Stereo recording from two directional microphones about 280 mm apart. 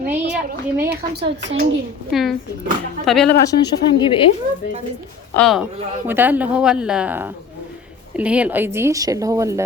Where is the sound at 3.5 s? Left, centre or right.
Centre.